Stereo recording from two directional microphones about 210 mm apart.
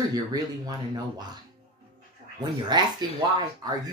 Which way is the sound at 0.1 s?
20° right (ahead or behind).